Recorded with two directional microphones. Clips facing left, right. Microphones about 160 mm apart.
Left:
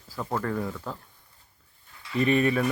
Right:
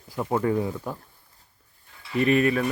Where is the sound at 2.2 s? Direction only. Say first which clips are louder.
Right 2 dB; 35° left (ahead or behind).